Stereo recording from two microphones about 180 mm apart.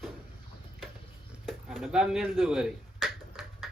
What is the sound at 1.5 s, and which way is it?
Finger snapping, centre (ahead or behind).